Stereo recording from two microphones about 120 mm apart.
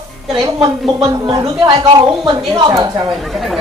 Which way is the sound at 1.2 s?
40° right (ahead or behind).